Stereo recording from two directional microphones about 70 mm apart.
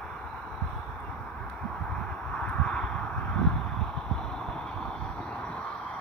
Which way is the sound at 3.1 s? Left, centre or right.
Left.